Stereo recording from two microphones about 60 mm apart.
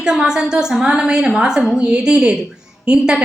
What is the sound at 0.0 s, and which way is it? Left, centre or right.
A woman's voice, centre.